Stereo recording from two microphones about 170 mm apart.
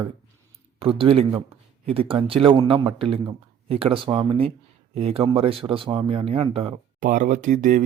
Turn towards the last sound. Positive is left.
turn(degrees=-50)  # may be behind; listen again after turning